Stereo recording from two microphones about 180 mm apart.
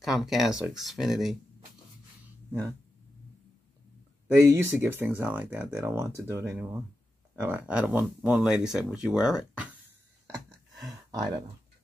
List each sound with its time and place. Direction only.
0.0 s speech: centre (ahead or behind)
4.4 s speech: 15° right (ahead or behind)
11.1 s speech: 20° right (ahead or behind)